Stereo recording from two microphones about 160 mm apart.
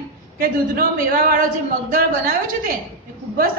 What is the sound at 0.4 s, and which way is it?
A woman's voice, 60° right (ahead or behind).